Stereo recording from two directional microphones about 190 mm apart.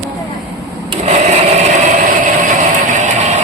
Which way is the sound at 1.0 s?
35° right (ahead or behind).